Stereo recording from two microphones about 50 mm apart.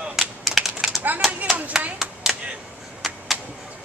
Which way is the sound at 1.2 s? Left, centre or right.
Centre.